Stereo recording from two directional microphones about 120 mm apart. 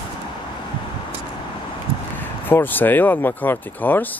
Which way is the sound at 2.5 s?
15° left (ahead or behind).